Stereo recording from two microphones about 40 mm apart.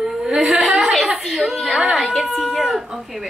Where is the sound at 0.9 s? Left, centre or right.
Centre.